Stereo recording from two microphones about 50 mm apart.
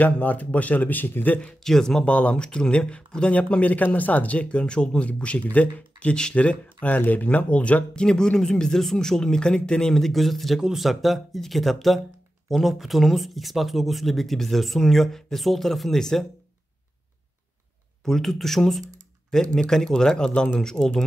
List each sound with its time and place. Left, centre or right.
0.0 s speech: left
1.6 s speech: centre
2.0 s speech: left; by 16.3 s centre
18.0 s speech: centre